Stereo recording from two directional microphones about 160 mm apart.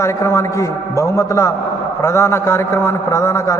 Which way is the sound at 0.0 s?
20° left (ahead or behind).